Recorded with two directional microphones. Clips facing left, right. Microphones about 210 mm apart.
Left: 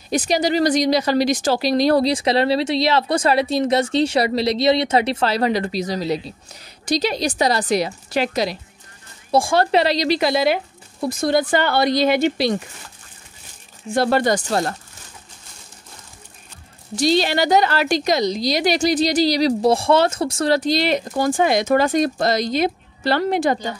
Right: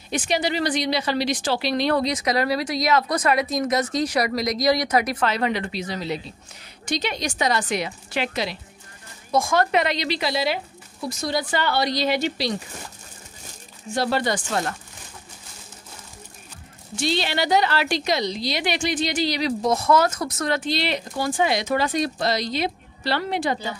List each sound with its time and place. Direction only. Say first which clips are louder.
0.1 s a woman's voice: left 5 dB; 40° left (ahead or behind); by 12.5 s 55° left (ahead or behind)
13.9 s speech: left 5 dB; 50° left (ahead or behind)
16.9 s a woman's voice: left 7 dB; 40° left (ahead or behind)